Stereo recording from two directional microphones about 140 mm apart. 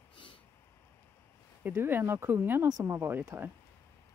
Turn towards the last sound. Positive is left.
turn(degrees=-15)  # may be behind; listen again after turning